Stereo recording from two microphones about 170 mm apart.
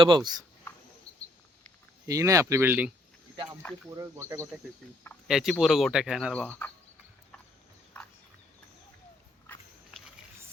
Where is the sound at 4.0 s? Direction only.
15° right (ahead or behind).